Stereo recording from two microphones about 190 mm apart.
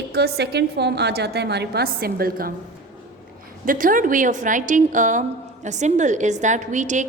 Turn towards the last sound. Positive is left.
turn(degrees=-40)  # may be behind; listen again after turning